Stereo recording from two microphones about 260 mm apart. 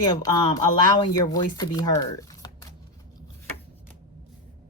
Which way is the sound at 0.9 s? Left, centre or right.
Centre.